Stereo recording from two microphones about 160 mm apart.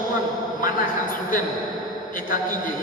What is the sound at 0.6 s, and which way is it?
Speech, 60° left (ahead or behind).